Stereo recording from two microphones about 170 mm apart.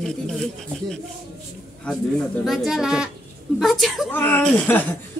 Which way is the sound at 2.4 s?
Centre (ahead or behind).